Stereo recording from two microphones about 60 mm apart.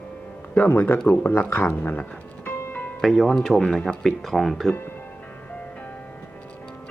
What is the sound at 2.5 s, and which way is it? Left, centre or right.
Music, left.